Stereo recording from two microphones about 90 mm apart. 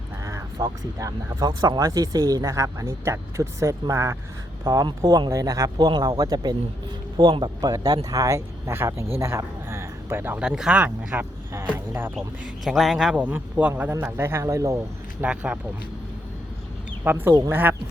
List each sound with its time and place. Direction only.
0.6 s speech: 45° right (ahead or behind)
5.7 s speech: 50° right (ahead or behind)
7.2 s a man's voice: 60° right (ahead or behind)
7.6 s speech: 45° right (ahead or behind); by 9.0 s 30° right (ahead or behind)
9.1 s a sound: 30° right (ahead or behind)
10.4 s a man's voice: 10° right (ahead or behind)
10.8 s speech: 20° right (ahead or behind)
12.6 s a man's voice: centre (ahead or behind)
13.1 s a man's voice: 20° right (ahead or behind)
13.9 s speech: 30° right (ahead or behind)
15.2 s a man's voice: 15° right (ahead or behind)
17.1 s speech: 20° right (ahead or behind)